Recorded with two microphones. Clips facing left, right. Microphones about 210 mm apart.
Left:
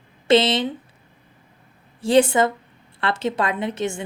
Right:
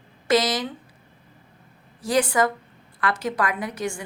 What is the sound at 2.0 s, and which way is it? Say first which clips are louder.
A woman's voice: left 5 dB; 25° left (ahead or behind).